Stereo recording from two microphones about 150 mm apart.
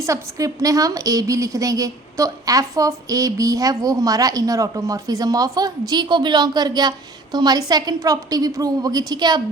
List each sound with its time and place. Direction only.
0.0 s a woman's voice: 20° right (ahead or behind)